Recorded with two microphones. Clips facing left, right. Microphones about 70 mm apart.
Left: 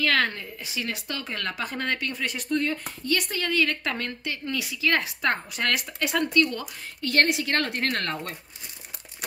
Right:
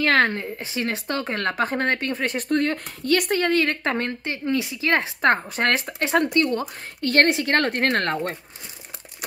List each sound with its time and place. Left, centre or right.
0.0 s a woman's voice: right